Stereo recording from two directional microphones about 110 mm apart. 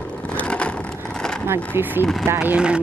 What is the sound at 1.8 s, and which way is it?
Speech, 20° right (ahead or behind).